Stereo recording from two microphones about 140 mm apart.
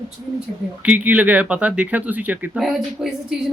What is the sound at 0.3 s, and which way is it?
Speech, 10° right (ahead or behind).